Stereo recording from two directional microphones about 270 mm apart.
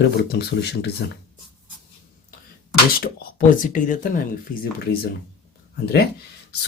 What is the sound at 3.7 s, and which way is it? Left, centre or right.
Speech, left.